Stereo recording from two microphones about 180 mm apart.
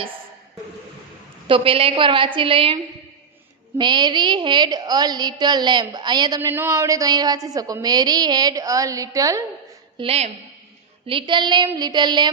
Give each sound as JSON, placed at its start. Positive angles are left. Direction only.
{"t": 1.5, "sound": "a woman's voice", "side_deg": -30}
{"t": 10.0, "sound": "a woman's voice", "side_deg": -35}